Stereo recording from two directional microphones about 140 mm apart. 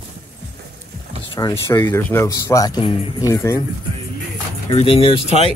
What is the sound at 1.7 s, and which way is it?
Speech, 15° left (ahead or behind).